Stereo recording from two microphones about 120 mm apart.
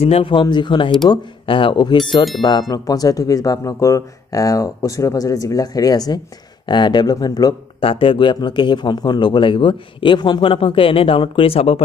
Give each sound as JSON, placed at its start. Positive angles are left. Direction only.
{"t": 0.0, "sound": "a man's voice", "side_deg": 50}
{"t": 7.8, "sound": "a man's voice", "side_deg": 45}